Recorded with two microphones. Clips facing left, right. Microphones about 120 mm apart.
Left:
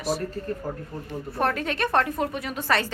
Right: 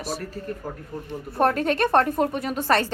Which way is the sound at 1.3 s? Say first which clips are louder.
Right 5 dB; 35° right (ahead or behind).